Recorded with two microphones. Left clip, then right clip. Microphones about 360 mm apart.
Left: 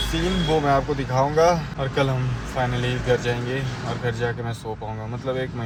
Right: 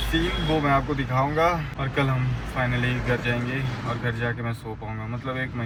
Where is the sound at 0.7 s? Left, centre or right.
Centre.